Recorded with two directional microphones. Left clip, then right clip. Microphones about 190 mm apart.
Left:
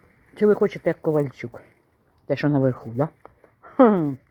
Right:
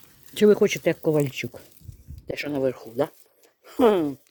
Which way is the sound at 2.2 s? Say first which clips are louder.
Left 4 dB; 30° right (ahead or behind).